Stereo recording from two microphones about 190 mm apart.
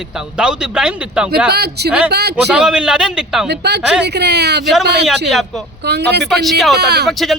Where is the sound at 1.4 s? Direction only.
55° right (ahead or behind).